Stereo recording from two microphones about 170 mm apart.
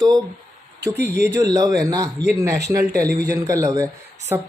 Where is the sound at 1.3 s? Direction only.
20° right (ahead or behind).